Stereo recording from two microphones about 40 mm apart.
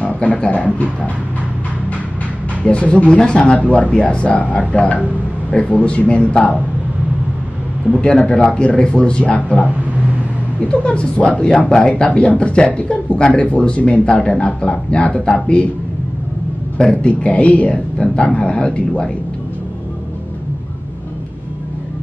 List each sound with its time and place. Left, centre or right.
0.0 s speech: left
2.6 s speech: left
3.7 s speech: left
7.9 s speech: left
9.3 s speech: left
10.7 s speech: left
14.1 s speech: left
16.7 s a man's voice: left
17.9 s speech: left